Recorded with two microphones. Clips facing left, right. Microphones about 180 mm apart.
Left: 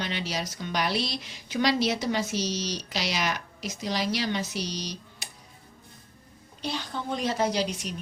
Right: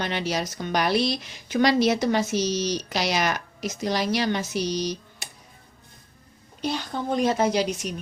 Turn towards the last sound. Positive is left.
turn(degrees=-50)  # may be behind; listen again after turning